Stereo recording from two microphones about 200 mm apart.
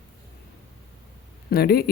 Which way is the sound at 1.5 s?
50° left (ahead or behind).